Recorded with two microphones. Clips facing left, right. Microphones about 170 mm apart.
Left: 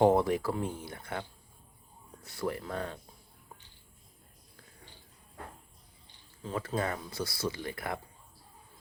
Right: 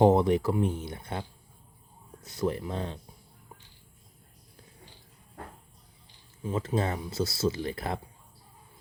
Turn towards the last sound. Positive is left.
turn(degrees=-25)  # may be behind; listen again after turning